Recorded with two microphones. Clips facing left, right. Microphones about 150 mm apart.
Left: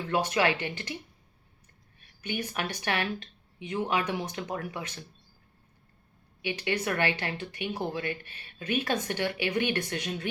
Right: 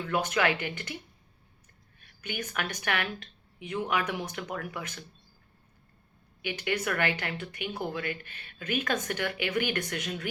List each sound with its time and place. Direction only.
0.0 s speech: 30° left (ahead or behind)
2.0 s speech: 25° left (ahead or behind)
6.4 s speech: 25° left (ahead or behind)